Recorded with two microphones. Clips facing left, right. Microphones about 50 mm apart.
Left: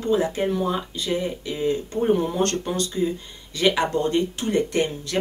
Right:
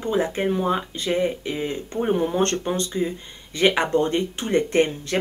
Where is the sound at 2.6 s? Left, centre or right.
Right.